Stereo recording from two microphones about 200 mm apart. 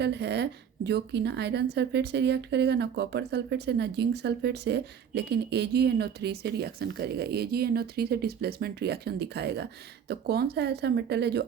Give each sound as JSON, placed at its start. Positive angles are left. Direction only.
{"t": 0.0, "sound": "speech", "side_deg": -55}